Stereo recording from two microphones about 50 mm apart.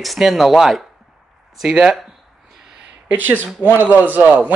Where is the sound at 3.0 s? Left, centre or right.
Right.